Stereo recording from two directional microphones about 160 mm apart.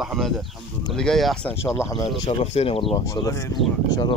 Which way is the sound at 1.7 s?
20° left (ahead or behind).